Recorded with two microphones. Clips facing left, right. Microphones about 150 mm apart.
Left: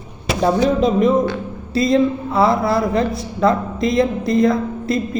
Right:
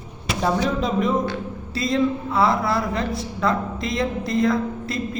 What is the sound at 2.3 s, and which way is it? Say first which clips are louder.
Speech: left 6 dB; 25° left (ahead or behind).